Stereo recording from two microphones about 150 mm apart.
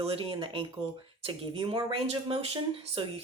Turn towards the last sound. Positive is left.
turn(degrees=-40)  # may be behind; listen again after turning